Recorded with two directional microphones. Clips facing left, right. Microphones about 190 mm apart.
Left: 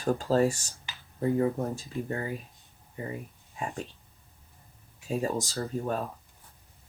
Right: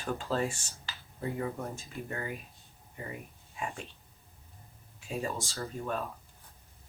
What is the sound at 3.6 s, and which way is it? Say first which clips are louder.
Speech: left 3 dB; 35° left (ahead or behind).